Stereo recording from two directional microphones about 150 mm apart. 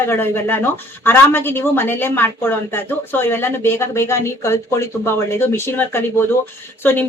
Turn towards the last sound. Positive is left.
turn(degrees=15)  # may be behind; listen again after turning